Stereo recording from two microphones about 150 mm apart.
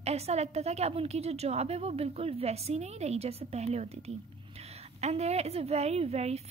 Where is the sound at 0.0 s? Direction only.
45° right (ahead or behind).